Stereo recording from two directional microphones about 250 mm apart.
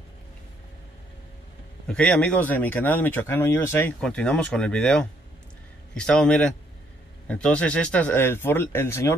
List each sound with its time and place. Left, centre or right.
1.9 s speech: centre